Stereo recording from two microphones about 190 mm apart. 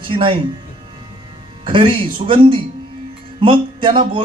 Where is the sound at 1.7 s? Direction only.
25° right (ahead or behind).